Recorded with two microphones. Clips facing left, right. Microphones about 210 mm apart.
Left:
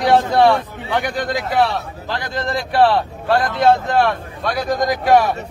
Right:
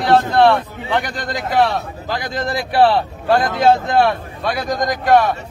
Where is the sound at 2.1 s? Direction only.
10° right (ahead or behind).